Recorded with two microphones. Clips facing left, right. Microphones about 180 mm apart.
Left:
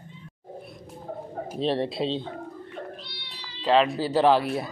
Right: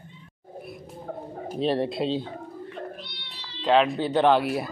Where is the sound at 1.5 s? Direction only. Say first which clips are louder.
Right 1 dB; centre (ahead or behind).